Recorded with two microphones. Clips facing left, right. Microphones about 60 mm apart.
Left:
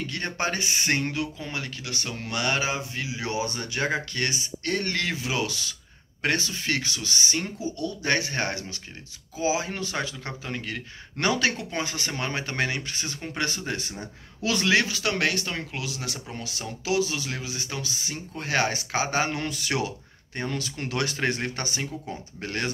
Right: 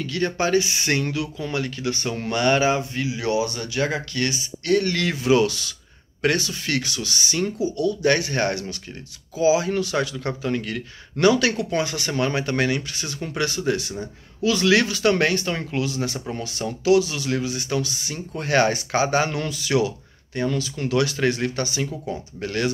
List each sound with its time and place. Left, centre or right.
0.0 s speech: left
1.8 s speech: centre
3.3 s speech: left
5.0 s speech: centre
6.3 s speech: left
11.1 s speech: left
14.7 s speech: centre
16.8 s speech: centre
19.2 s speech: left
19.7 s speech: centre
20.5 s speech: left